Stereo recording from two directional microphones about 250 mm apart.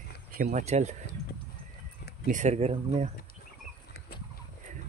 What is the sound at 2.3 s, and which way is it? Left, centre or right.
Speech, right.